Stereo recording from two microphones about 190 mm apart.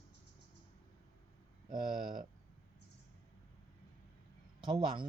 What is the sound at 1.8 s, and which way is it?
Speech, 25° right (ahead or behind).